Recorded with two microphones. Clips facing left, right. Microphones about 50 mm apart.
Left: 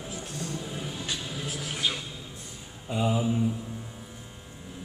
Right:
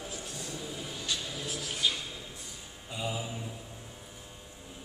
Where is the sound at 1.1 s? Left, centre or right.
Left.